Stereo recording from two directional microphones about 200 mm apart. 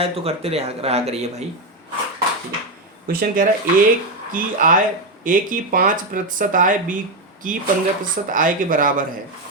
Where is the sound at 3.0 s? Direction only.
45° right (ahead or behind).